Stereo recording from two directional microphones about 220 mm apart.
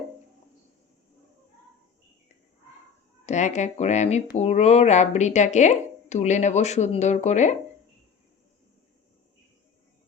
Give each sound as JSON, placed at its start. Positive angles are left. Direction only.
{"t": 3.2, "sound": "speech", "side_deg": 30}